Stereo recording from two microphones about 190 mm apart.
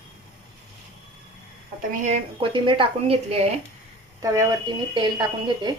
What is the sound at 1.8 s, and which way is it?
A woman's voice, 40° right (ahead or behind).